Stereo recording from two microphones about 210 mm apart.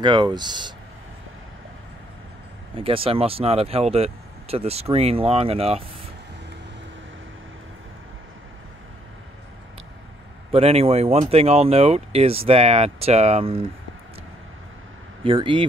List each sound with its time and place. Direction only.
0.0 s speech: 20° right (ahead or behind)
2.7 s speech: 25° right (ahead or behind)
10.5 s speech: 30° right (ahead or behind)
15.2 s speech: 25° right (ahead or behind)